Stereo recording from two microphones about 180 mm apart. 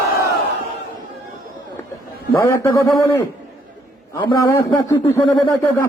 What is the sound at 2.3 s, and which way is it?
A man's voice, 15° left (ahead or behind).